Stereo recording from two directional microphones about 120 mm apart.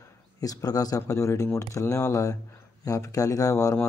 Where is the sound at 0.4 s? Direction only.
30° left (ahead or behind).